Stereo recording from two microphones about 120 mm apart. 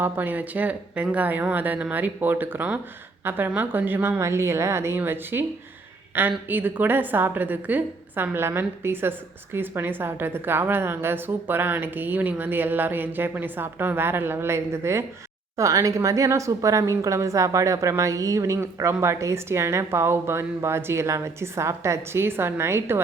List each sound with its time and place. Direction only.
0.0 s a woman's voice: 15° right (ahead or behind)